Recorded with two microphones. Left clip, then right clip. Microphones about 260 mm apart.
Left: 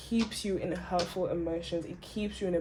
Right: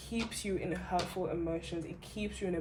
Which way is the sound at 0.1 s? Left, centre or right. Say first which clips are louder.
Left 4 dB; left.